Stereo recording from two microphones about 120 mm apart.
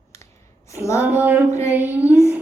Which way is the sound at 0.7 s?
25° left (ahead or behind).